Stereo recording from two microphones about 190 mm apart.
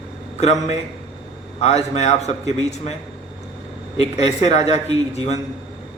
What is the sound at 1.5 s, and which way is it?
A man's voice, 35° left (ahead or behind).